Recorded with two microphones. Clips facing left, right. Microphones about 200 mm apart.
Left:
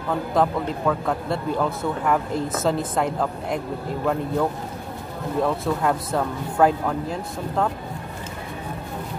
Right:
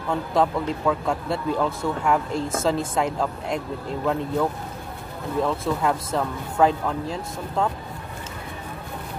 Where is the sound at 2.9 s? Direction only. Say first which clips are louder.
Left 1 dB; centre (ahead or behind).